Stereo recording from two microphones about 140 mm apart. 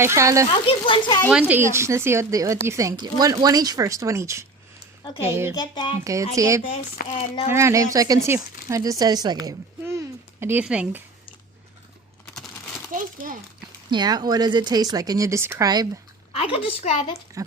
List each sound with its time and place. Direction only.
0.0 s speech: 20° right (ahead or behind)
0.7 s a woman's voice: 40° left (ahead or behind)
1.3 s speech: 10° right (ahead or behind)
5.5 s a woman's voice: 30° left (ahead or behind)
6.3 s speech: 25° right (ahead or behind)
7.1 s a woman's voice: 40° left (ahead or behind)
7.5 s speech: 20° right (ahead or behind)
10.4 s speech: 10° right (ahead or behind)
12.9 s a sound: 70° right (ahead or behind)
13.9 s speech: 30° right (ahead or behind)
16.6 s a woman's voice: 40° left (ahead or behind)
17.4 s speech: 25° right (ahead or behind)